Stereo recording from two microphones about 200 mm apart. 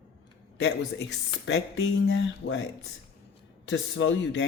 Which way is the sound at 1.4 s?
65° left (ahead or behind).